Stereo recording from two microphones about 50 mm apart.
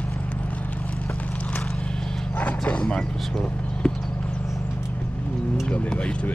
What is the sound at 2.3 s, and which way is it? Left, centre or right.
Bow-wow, left.